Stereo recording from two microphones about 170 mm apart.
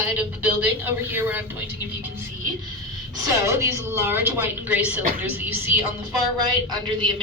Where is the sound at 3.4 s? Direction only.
15° right (ahead or behind).